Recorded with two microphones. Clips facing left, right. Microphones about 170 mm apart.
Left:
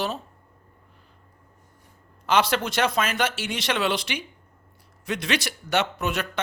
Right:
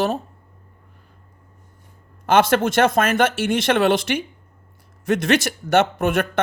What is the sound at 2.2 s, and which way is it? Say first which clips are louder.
Speech: right 6 dB; 50° right (ahead or behind).